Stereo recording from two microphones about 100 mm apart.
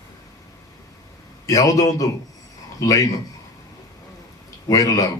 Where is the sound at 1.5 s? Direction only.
35° left (ahead or behind).